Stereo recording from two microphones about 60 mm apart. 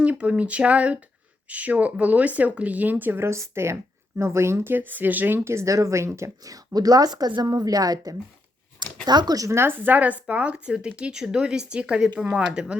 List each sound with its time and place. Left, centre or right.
0.0 s speech: right
3.2 s speech: right
5.5 s speech: right
6.4 s a woman's voice: right
9.3 s speech: right
9.6 s speech: right; by 12.7 s centre